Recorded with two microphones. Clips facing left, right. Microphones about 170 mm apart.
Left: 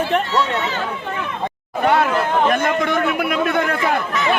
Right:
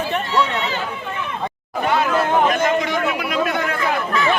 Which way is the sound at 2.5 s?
55° left (ahead or behind).